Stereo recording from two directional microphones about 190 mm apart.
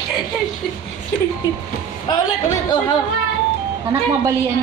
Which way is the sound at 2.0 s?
20° left (ahead or behind).